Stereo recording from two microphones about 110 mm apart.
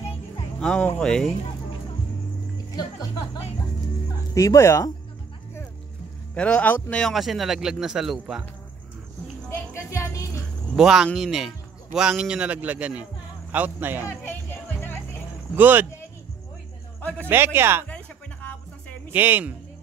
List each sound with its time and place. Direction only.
0.6 s a man's voice: 5° left (ahead or behind)
2.5 s speech: 35° left (ahead or behind)
6.3 s a man's voice: 10° left (ahead or behind)
9.8 s music: 30° left (ahead or behind)
10.8 s a man's voice: 5° right (ahead or behind)
15.5 s speech: 15° right (ahead or behind)
17.3 s speech: 20° right (ahead or behind)
17.8 s music: 15° left (ahead or behind)
19.1 s speech: 15° right (ahead or behind)